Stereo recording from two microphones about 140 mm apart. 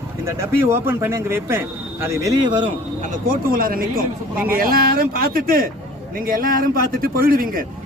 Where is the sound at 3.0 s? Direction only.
80° right.